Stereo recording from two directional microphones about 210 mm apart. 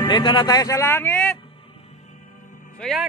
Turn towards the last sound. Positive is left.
turn(degrees=0)  # may be behind; listen again after turning